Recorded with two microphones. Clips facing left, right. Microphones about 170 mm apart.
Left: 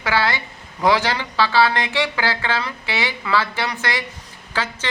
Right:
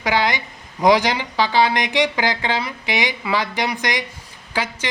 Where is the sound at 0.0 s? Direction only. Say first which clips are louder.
Right 1 dB; 15° right (ahead or behind).